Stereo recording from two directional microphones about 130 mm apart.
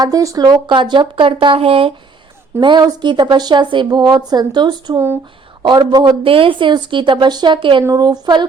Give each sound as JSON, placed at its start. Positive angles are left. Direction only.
{"t": 0.0, "sound": "speech", "side_deg": -25}
{"t": 2.6, "sound": "speech", "side_deg": -35}